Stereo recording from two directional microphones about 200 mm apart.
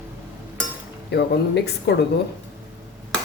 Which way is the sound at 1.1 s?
55° left (ahead or behind).